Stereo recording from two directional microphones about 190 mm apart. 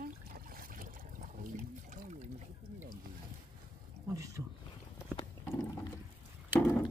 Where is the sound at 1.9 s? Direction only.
40° right (ahead or behind).